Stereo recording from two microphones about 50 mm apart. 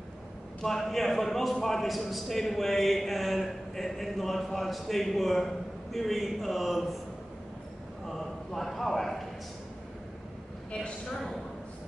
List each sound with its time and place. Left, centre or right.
0.6 s a man's voice: centre
8.1 s a man's voice: centre
10.7 s speech: left